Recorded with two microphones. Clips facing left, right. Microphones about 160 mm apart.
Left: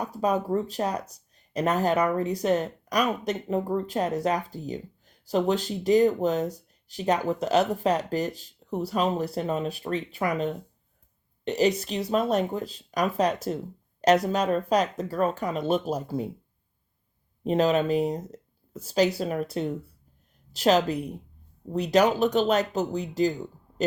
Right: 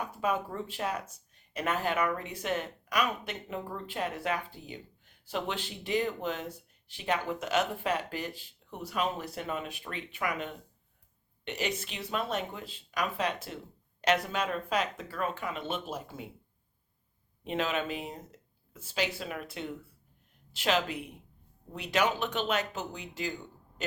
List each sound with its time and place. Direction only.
0.0 s speech: 40° left (ahead or behind)
17.4 s speech: 40° left (ahead or behind)